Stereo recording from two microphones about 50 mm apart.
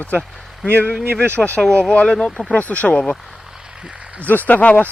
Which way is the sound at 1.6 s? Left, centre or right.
Centre.